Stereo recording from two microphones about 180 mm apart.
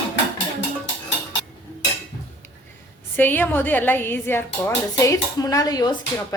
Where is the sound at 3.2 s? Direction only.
10° left (ahead or behind).